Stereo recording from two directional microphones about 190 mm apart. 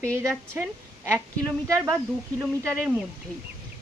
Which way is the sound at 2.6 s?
5° left (ahead or behind).